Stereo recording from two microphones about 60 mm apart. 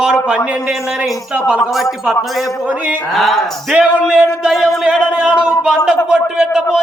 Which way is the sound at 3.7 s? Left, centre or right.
Centre.